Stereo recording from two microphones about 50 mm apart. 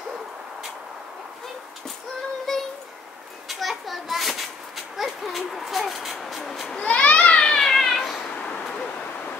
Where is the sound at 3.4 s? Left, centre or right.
Centre.